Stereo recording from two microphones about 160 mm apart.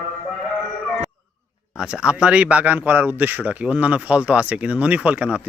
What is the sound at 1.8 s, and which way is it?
Speech, 5° right (ahead or behind).